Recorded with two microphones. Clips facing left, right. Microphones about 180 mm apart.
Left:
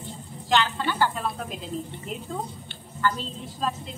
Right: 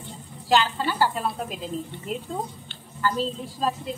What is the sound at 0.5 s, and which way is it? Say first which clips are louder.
Speech: right 2 dB; 10° right (ahead or behind).